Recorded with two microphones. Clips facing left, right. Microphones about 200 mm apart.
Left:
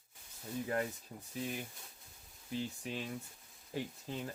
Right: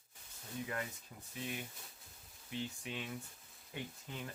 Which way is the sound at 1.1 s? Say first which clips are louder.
Left 5 dB; 35° left (ahead or behind).